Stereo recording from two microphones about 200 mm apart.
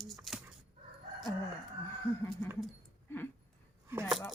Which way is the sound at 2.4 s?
10° left (ahead or behind).